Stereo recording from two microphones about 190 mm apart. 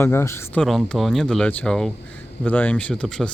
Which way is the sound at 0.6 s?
Centre (ahead or behind).